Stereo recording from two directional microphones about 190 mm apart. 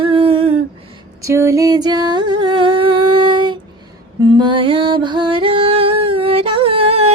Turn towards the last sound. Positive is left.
turn(degrees=-30)  # may be behind; listen again after turning